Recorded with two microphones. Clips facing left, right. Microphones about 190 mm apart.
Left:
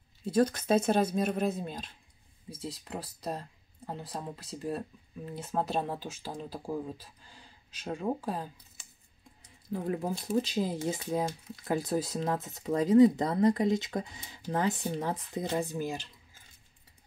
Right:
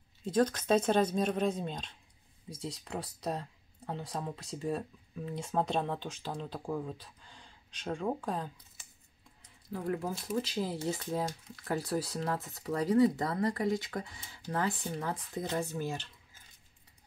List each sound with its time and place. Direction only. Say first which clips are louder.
0.2 s speech: left 2 dB; 10° left (ahead or behind)
9.7 s speech: left 2 dB; 20° left (ahead or behind)